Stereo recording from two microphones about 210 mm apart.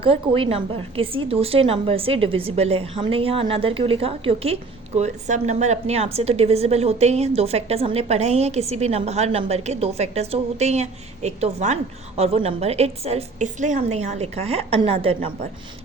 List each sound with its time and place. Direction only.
0.0 s a woman's voice: 25° right (ahead or behind)